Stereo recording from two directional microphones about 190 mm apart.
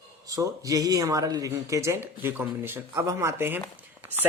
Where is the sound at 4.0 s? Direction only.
10° right (ahead or behind).